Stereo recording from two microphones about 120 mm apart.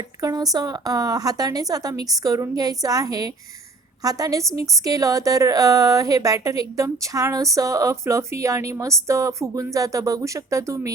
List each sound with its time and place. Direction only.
0.2 s a woman's voice: 30° right (ahead or behind)